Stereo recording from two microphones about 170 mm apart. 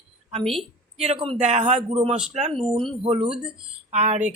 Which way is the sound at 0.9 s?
35° right (ahead or behind).